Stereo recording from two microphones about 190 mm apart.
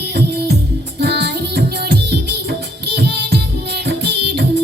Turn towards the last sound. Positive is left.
turn(degrees=-60)  # may be behind; listen again after turning